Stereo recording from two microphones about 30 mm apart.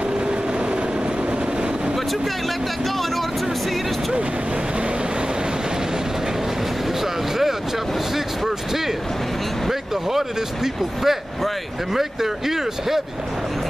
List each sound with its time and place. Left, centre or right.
8.5 s speech: centre